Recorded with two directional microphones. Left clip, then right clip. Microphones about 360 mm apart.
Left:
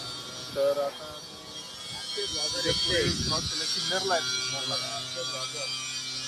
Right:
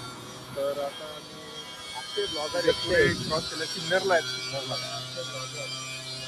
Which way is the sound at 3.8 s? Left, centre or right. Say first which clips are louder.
Right 6 dB; centre.